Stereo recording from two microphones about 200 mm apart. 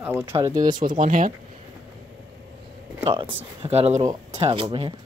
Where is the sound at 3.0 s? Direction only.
25° right (ahead or behind).